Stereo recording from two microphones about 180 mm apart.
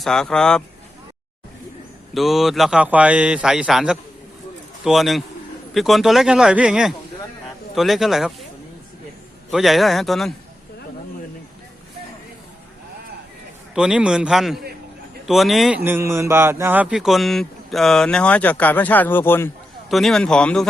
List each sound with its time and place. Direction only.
0.0 s speech: 5° left (ahead or behind)
2.1 s speech: centre (ahead or behind)
9.5 s speech: centre (ahead or behind)
13.7 s speech: 5° right (ahead or behind)
15.8 s speech: 15° right (ahead or behind); by 19.5 s 10° left (ahead or behind)
19.9 s speech: centre (ahead or behind)